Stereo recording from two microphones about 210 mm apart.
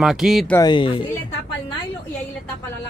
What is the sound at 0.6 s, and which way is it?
Speech, 20° left (ahead or behind).